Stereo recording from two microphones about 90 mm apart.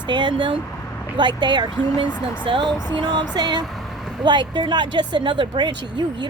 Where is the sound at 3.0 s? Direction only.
55° right (ahead or behind).